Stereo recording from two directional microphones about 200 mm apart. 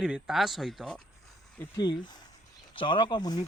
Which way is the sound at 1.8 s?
20° left (ahead or behind).